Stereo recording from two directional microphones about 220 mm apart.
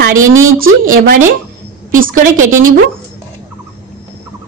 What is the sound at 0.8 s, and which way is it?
A woman's voice, 40° right (ahead or behind).